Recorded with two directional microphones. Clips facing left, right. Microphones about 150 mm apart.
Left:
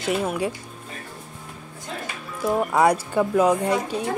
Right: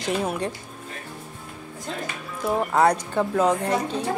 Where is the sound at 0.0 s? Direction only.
Centre (ahead or behind).